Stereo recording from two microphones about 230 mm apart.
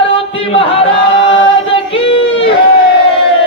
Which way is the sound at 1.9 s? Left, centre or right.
Left.